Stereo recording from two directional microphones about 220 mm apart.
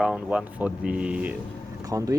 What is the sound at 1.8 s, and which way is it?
Speech, 15° right (ahead or behind).